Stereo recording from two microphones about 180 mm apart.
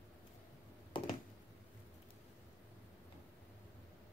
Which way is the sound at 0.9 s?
25° left (ahead or behind).